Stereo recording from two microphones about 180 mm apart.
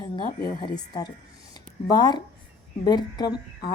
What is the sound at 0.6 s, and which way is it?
Speech, 25° left (ahead or behind).